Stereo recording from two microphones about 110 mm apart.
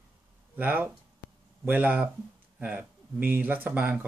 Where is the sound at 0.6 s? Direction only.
15° right (ahead or behind).